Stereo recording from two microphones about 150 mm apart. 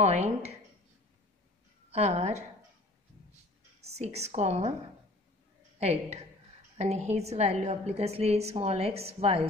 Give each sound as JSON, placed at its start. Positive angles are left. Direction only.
{"t": 0.0, "sound": "a woman's voice", "side_deg": -45}
{"t": 1.9, "sound": "a woman's voice", "side_deg": -45}
{"t": 4.0, "sound": "a woman's voice", "side_deg": -45}
{"t": 5.8, "sound": "a woman's voice", "side_deg": -45}